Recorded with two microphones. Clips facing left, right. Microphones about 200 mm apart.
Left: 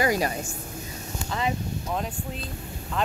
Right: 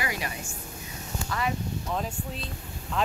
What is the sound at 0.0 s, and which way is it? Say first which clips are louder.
Speech: left 9 dB; 40° left (ahead or behind).